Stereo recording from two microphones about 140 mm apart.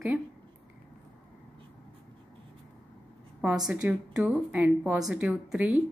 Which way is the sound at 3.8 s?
10° right (ahead or behind).